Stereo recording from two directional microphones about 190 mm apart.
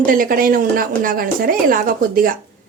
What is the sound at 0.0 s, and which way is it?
Speech, 45° right (ahead or behind).